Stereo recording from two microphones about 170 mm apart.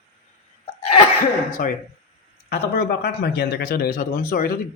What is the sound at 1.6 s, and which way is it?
Speech, 55° left (ahead or behind).